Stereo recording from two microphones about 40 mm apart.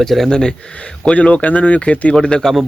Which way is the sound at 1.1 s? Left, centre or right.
Left.